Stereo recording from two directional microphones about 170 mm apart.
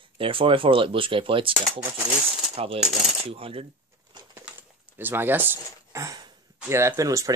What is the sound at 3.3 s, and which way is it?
Speech, 35° right (ahead or behind).